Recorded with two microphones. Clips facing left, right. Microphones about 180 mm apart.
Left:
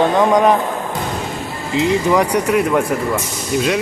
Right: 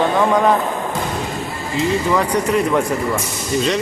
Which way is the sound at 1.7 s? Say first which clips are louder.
Left 3 dB; 15° left (ahead or behind).